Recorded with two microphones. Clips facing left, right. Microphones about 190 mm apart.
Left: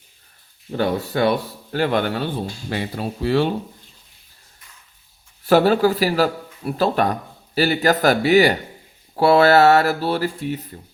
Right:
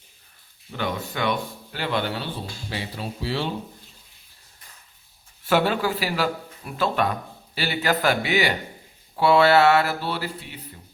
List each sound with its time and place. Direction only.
0.7 s speech: 40° left (ahead or behind); by 3.5 s 55° left (ahead or behind)
5.5 s a man's voice: 40° left (ahead or behind)